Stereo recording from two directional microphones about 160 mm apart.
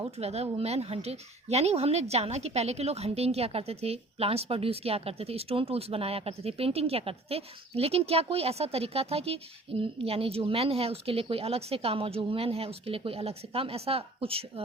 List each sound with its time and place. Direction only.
0.2 s a woman's voice: 40° right (ahead or behind)